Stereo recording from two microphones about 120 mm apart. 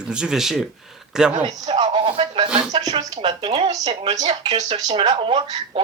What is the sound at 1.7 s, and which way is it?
Speech, 50° right (ahead or behind).